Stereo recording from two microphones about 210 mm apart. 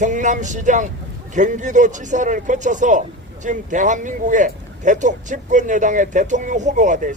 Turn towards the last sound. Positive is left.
turn(degrees=-35)  # may be behind; listen again after turning